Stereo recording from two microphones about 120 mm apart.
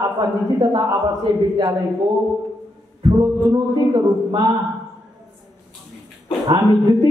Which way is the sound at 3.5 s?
40° right (ahead or behind).